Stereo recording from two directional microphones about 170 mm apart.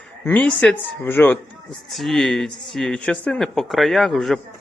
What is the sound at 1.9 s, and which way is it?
Speech, centre (ahead or behind).